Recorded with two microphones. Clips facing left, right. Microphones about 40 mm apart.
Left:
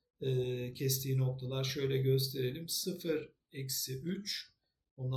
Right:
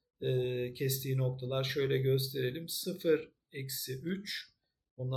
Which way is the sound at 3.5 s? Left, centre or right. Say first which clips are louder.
Right 1 dB; centre.